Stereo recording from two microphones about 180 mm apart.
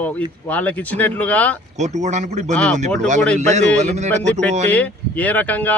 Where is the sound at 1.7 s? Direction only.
40° right (ahead or behind).